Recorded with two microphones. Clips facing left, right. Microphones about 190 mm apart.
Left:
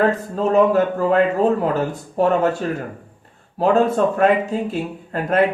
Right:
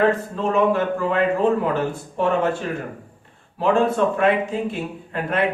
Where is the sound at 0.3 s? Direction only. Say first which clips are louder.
Left 8 dB; 40° left (ahead or behind).